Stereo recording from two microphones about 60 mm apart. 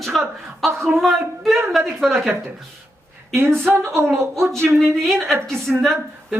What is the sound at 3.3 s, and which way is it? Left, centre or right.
A woman's voice, right.